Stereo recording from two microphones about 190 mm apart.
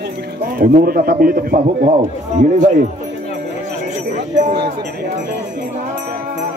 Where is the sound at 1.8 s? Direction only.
35° right (ahead or behind).